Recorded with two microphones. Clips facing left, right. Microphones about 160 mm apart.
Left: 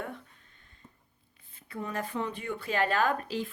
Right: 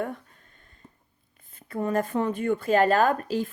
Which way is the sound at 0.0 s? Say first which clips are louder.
Right 8 dB; 45° right (ahead or behind).